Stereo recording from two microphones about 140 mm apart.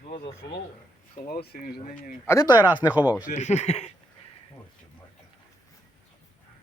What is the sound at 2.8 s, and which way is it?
Speech, 10° right (ahead or behind).